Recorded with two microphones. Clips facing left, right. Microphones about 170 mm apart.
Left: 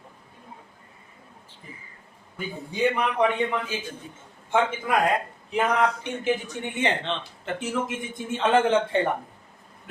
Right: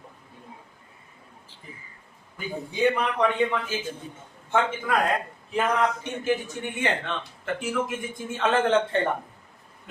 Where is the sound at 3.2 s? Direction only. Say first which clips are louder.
Even; 15° left (ahead or behind).